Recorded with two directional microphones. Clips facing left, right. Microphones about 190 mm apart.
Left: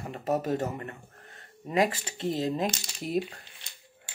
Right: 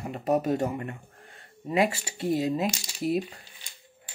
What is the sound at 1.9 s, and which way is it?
Speech, 10° right (ahead or behind).